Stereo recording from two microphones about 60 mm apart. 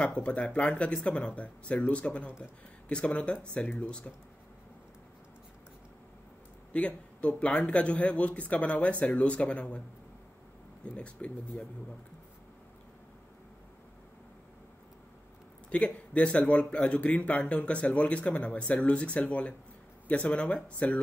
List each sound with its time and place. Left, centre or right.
0.0 s speech: centre
6.7 s speech: left
11.0 s speech: left
15.7 s speech: left